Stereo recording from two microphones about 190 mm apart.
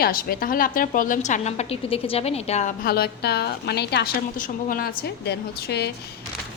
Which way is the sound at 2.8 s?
55° left (ahead or behind).